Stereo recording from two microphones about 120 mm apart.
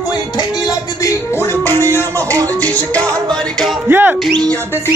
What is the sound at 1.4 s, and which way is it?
Music, 20° left (ahead or behind).